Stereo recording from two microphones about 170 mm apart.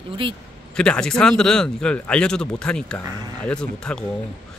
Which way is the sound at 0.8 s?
5° left (ahead or behind).